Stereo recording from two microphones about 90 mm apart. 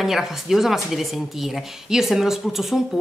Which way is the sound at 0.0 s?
5° right (ahead or behind).